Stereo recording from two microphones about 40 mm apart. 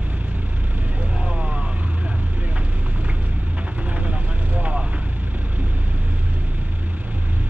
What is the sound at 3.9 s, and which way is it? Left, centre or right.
Vehicle, right.